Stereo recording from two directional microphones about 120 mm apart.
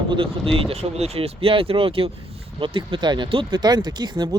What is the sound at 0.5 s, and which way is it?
Speech, 55° right (ahead or behind).